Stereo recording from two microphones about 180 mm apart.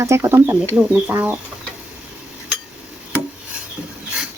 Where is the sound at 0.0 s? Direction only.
15° right (ahead or behind).